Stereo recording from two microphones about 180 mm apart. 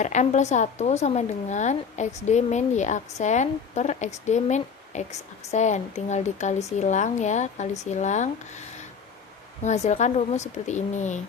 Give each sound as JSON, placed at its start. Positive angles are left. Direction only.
{"t": 0.0, "sound": "speech", "side_deg": 40}
{"t": 9.6, "sound": "speech", "side_deg": 40}